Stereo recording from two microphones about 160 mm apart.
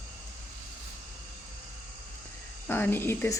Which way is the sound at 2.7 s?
10° left (ahead or behind).